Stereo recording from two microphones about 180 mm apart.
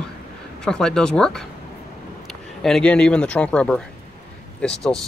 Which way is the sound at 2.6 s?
5° left (ahead or behind).